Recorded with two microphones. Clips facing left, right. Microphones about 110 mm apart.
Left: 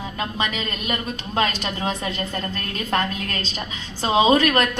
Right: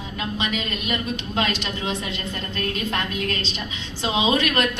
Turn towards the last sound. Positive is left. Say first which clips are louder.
# left 4 dB
turn(degrees=40)  # may be behind; listen again after turning